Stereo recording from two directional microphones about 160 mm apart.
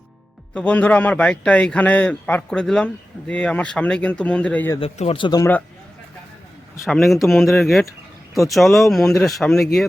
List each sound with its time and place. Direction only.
0.5 s speech: 10° left (ahead or behind)
4.8 s speech: 35° left (ahead or behind)
5.4 s speech: 10° left (ahead or behind)
6.8 s speech: centre (ahead or behind)